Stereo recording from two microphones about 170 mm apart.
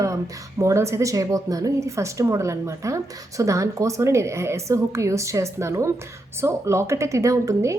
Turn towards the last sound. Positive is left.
turn(degrees=-20)  # may be behind; listen again after turning